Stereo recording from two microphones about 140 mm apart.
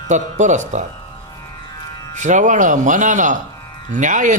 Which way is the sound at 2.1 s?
60° right (ahead or behind).